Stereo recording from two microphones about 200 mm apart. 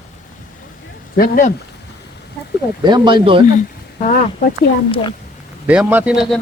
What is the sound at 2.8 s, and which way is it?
Speech, 20° right (ahead or behind).